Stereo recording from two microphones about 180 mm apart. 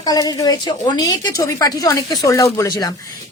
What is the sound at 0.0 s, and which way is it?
A woman's voice, 20° left (ahead or behind).